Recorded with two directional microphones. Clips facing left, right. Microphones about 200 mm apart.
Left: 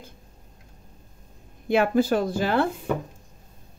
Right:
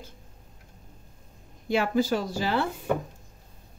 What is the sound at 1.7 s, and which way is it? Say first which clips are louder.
Speech: left 4 dB; 55° left (ahead or behind).